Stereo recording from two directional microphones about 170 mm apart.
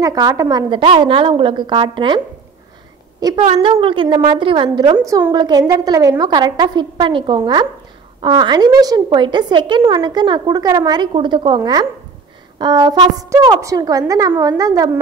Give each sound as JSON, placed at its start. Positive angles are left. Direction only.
{"t": 0.0, "sound": "a woman's voice", "side_deg": -20}
{"t": 3.4, "sound": "a woman's voice", "side_deg": -35}
{"t": 4.9, "sound": "a woman's voice", "side_deg": -15}